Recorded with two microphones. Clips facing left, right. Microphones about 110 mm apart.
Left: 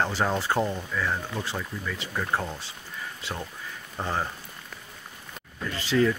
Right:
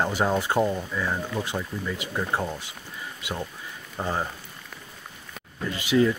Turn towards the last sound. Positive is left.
turn(degrees=-15)  # may be behind; listen again after turning